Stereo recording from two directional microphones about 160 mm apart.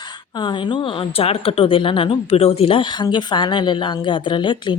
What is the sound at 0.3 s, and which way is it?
A woman's voice, 30° left (ahead or behind).